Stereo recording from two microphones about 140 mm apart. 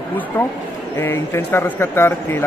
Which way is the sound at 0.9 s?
15° left (ahead or behind).